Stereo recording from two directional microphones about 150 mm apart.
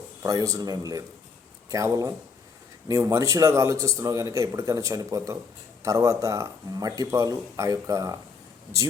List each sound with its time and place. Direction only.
0.2 s a man's voice: 25° right (ahead or behind)